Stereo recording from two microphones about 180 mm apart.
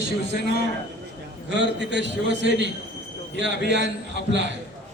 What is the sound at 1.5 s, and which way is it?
A man's voice, 80° right.